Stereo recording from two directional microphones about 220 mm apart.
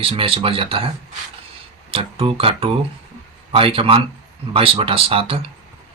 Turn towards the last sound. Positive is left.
turn(degrees=-25)  # may be behind; listen again after turning